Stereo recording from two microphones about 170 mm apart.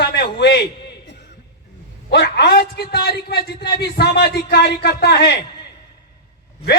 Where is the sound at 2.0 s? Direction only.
85° left.